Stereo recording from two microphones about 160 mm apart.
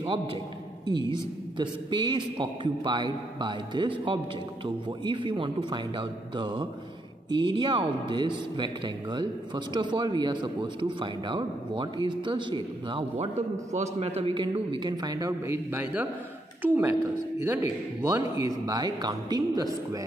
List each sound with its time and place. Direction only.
0.0 s a woman's voice: 35° right (ahead or behind)